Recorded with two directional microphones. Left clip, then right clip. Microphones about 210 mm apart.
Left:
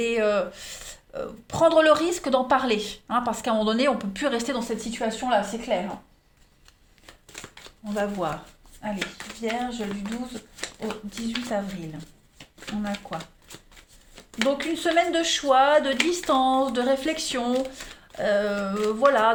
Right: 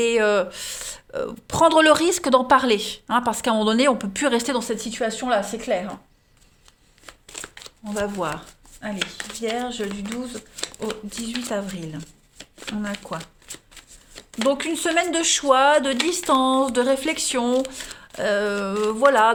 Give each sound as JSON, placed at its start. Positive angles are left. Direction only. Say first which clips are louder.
{"t": 0.0, "sound": "speech", "louder": "right 4 dB", "side_deg": -45}
{"t": 7.9, "sound": "speech", "louder": "right 1 dB", "side_deg": -25}
{"t": 9.4, "sound": "speech", "louder": "right 2 dB", "side_deg": -45}
{"t": 10.8, "sound": "speech", "louder": "right 2 dB", "side_deg": -40}
{"t": 14.3, "sound": "speech", "louder": "right 3 dB", "side_deg": -40}